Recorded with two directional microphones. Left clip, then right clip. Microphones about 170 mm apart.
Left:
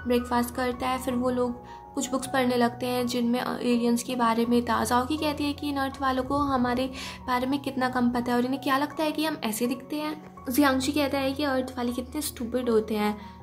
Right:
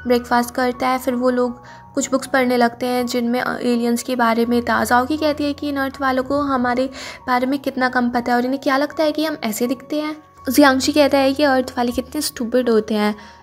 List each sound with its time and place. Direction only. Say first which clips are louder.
0.1 s a woman's voice: right 9 dB; 30° right (ahead or behind)